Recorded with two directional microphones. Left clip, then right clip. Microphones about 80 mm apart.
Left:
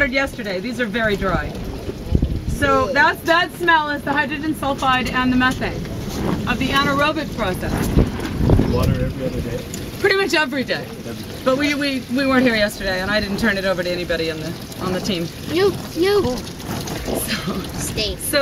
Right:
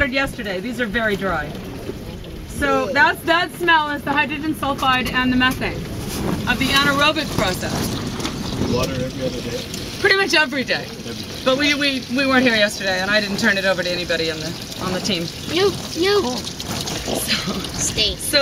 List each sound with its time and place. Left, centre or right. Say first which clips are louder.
0.0 s speech: left 1 dB; centre
2.8 s speech: even; centre
5.0 s speech: even; right; by 8.3 s centre
10.0 s speech: right 1 dB; centre